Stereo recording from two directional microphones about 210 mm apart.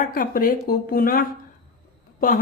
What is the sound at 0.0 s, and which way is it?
Speech, 40° left (ahead or behind).